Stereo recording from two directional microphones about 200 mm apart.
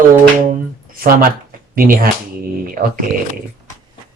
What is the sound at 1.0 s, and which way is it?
Speech, 45° right (ahead or behind).